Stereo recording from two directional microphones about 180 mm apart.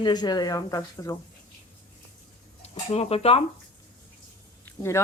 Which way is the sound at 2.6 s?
35° left (ahead or behind).